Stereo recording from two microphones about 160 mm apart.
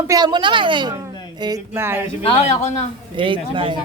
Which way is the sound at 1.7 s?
15° right (ahead or behind).